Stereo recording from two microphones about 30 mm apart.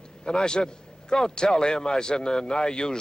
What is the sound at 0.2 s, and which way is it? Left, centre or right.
A man's voice, left.